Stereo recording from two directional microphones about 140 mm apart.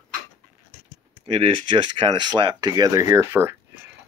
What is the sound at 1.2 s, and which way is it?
Speech, 40° right (ahead or behind).